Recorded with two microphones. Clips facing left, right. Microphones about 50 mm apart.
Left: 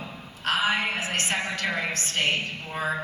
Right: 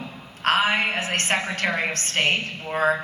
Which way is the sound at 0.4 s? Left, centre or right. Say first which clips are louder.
Right 4 dB; right.